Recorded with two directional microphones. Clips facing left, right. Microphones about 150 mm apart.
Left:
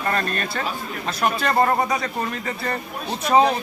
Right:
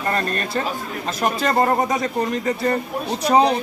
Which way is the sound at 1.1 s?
40° right (ahead or behind).